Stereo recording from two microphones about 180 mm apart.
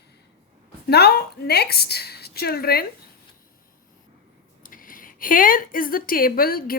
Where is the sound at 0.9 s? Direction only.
65° left (ahead or behind).